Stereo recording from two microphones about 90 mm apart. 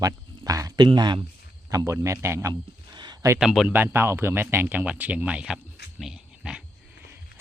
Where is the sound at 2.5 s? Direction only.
55° right (ahead or behind).